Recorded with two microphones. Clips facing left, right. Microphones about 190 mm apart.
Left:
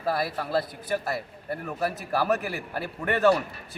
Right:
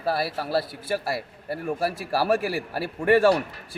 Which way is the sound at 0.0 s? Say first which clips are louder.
Right 1 dB; 30° right (ahead or behind).